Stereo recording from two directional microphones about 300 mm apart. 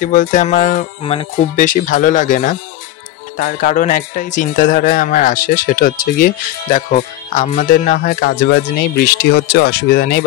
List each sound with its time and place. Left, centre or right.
0.0 s speech: left